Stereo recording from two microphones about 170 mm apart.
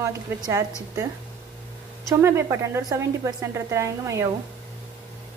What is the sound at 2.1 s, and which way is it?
A woman's voice, 15° right (ahead or behind).